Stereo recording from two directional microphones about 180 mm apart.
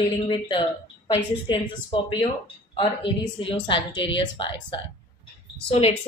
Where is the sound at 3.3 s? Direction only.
30° left (ahead or behind).